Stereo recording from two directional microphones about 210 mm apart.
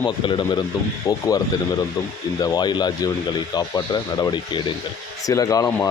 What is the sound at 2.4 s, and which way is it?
Speech, 20° left (ahead or behind).